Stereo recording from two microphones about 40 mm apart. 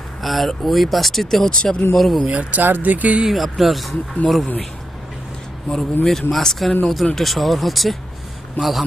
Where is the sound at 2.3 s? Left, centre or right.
Right.